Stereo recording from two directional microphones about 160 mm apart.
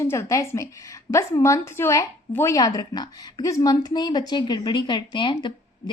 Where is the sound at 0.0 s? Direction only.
20° left (ahead or behind).